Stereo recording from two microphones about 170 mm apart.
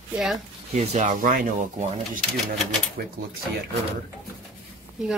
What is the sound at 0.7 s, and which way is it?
Speech, 40° right (ahead or behind).